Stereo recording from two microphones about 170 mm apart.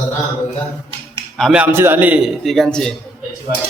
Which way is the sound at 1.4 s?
Centre (ahead or behind).